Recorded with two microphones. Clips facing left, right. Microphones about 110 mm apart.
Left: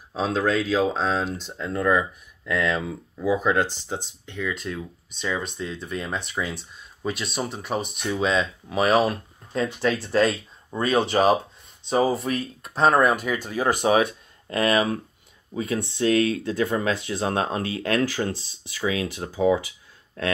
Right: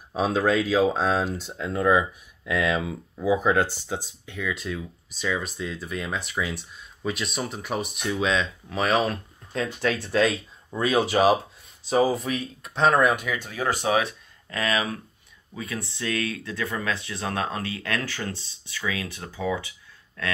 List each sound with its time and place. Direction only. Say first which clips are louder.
0.1 s speech: right 1 dB; 10° right (ahead or behind)
12.7 s speech: left 1 dB; 35° left (ahead or behind)
14.6 s speech: left 5 dB; 40° left (ahead or behind)
15.5 s speech: left 7 dB; 30° left (ahead or behind)